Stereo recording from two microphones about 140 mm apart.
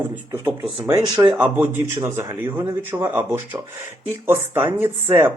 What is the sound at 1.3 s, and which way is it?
Speech, 15° right (ahead or behind).